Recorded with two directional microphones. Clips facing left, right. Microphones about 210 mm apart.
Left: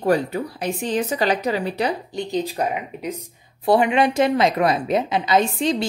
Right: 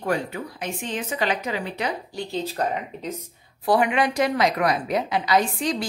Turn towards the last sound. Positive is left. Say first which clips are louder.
# left 3 dB
turn(degrees=25)  # may be behind; listen again after turning